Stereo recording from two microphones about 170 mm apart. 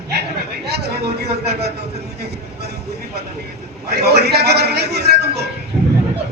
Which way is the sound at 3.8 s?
75° right (ahead or behind).